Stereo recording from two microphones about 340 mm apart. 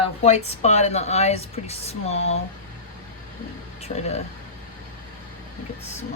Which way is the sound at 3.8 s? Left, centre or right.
Centre.